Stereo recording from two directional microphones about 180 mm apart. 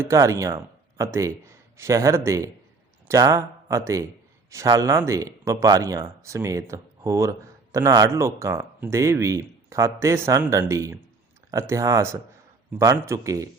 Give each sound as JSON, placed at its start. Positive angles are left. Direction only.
{"t": 0.0, "sound": "speech", "side_deg": -15}